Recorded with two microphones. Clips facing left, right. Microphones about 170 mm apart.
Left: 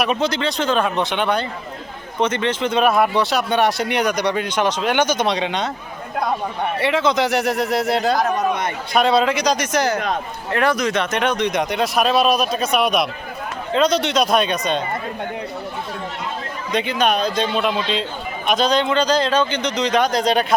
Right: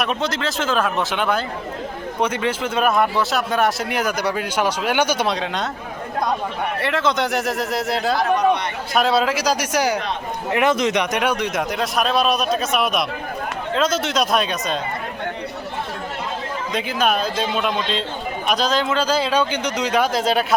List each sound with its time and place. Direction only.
0.0 s speech: centre (ahead or behind)
6.7 s speech: centre (ahead or behind)
8.2 s a sound: 45° left (ahead or behind)
8.9 s speech: centre (ahead or behind)
10.5 s speech: 20° right (ahead or behind); by 14.8 s centre (ahead or behind)
16.7 s speech: 5° right (ahead or behind)